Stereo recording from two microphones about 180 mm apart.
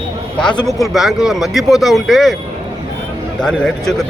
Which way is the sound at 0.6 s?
Centre (ahead or behind).